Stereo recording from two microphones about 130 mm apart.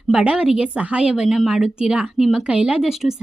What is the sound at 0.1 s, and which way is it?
A woman's voice, 5° right (ahead or behind).